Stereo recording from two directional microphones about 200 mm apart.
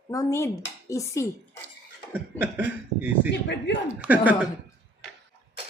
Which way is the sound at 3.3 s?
60° left (ahead or behind).